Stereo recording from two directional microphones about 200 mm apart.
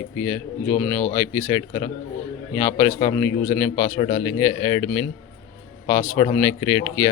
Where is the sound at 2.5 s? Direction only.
10° left (ahead or behind).